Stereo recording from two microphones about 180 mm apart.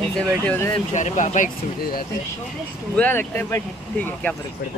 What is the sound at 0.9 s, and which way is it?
Speech, 40° left (ahead or behind).